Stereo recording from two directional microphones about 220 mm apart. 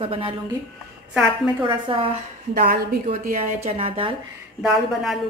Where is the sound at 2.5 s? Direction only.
45° right (ahead or behind); by 4.2 s 25° right (ahead or behind).